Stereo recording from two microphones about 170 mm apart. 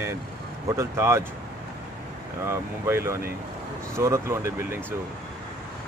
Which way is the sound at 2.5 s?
15° right (ahead or behind).